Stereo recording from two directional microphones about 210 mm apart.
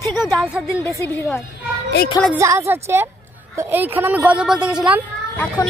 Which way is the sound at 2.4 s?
10° right (ahead or behind).